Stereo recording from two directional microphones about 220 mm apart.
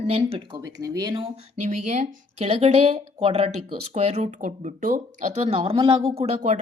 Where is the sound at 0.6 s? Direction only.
15° right (ahead or behind).